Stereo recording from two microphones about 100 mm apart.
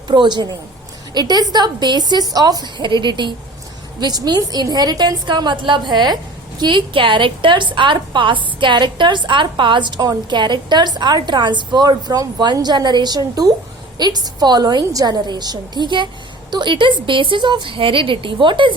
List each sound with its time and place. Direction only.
0.1 s a woman's voice: 50° right (ahead or behind)